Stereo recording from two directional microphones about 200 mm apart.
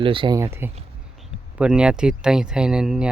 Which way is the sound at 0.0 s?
25° right (ahead or behind).